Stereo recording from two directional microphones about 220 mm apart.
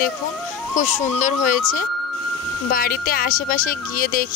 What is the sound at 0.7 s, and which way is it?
Speech, 35° left (ahead or behind).